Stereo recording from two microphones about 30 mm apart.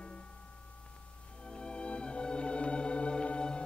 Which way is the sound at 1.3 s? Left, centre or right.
Left.